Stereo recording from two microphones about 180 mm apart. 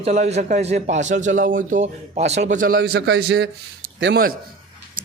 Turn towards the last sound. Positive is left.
turn(degrees=-90)